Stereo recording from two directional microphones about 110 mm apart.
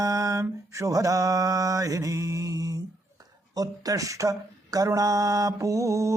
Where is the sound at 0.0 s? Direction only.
30° right (ahead or behind).